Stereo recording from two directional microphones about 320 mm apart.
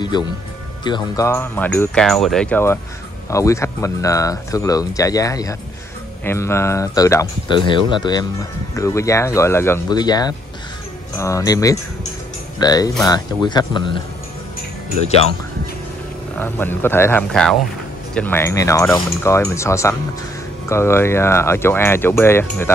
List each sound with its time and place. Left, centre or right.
0.0 s speech: centre
16.3 s speech: centre